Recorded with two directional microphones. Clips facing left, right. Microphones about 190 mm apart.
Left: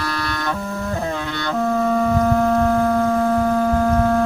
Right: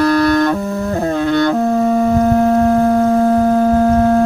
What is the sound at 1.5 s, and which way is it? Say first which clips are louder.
Foghorn: right 5 dB; 30° right (ahead or behind).